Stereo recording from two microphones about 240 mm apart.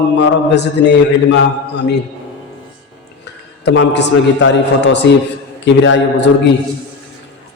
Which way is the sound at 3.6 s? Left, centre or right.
Left.